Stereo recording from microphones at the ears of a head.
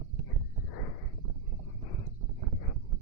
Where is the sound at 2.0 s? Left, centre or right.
Right.